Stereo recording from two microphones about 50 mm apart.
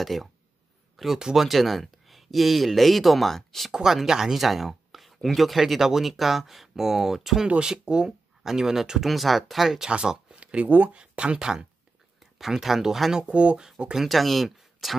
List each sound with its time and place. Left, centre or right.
0.0 s speech: centre
3.7 s speech: centre
7.4 s speech: centre
9.8 s speech: centre; by 11.0 s right
11.0 s speech: centre
13.3 s speech: right
13.9 s speech: centre